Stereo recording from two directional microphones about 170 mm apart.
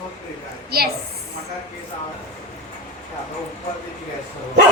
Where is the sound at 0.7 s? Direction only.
65° right (ahead or behind).